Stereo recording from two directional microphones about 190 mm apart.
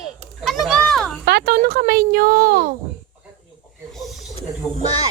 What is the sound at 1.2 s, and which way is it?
Speech, 55° right (ahead or behind).